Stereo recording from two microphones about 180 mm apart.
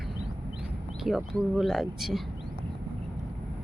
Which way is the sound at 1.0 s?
Centre (ahead or behind).